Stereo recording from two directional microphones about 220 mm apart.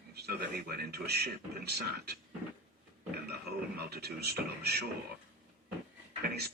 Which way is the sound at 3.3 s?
45° right (ahead or behind).